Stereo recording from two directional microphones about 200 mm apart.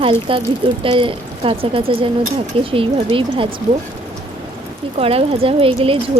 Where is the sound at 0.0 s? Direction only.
25° right (ahead or behind).